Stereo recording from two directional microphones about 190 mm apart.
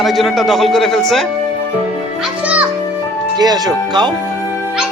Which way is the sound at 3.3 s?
20° right (ahead or behind).